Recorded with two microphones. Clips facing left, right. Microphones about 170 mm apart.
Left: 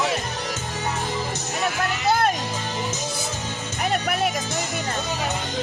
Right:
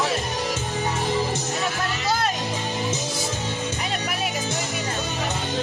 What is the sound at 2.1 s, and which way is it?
Music, 55° left (ahead or behind).